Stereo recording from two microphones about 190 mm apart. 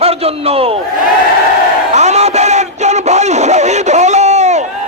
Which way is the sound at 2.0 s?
35° right (ahead or behind).